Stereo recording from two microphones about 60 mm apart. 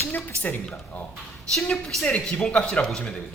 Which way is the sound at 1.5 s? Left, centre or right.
Centre.